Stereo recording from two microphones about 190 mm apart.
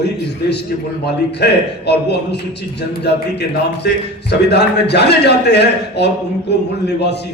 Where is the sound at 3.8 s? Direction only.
60° left (ahead or behind).